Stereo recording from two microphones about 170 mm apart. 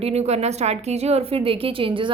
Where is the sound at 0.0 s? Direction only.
40° right (ahead or behind).